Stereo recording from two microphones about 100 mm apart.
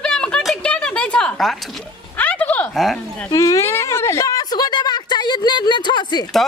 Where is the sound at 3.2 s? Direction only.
35° left (ahead or behind).